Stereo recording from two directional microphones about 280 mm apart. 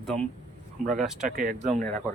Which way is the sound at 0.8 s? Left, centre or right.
Right.